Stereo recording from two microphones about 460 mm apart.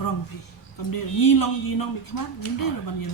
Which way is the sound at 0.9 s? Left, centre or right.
Left.